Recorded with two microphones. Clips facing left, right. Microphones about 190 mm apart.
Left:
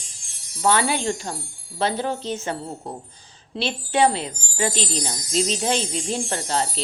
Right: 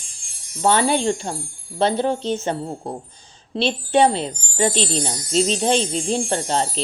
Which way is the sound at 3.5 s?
25° right (ahead or behind).